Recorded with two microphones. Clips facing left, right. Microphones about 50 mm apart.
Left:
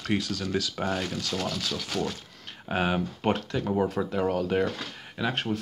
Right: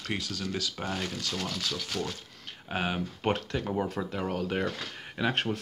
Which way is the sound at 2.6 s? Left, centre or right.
Centre.